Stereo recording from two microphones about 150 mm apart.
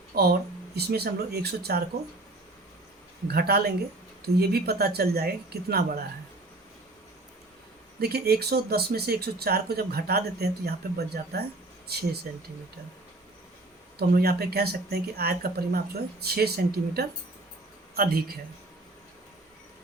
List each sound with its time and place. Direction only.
0.1 s a sound: 90° right
0.8 s speech: 90° right
3.2 s speech: 90° right
8.0 s speech: 90° right
14.2 s speech: 90° right